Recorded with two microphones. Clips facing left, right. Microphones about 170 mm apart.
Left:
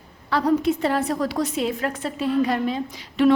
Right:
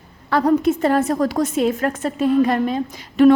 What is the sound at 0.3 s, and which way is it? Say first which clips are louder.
A woman's voice: right 4 dB; 50° right (ahead or behind).